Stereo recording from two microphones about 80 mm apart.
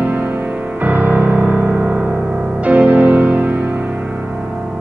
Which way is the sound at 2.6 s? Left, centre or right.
Centre.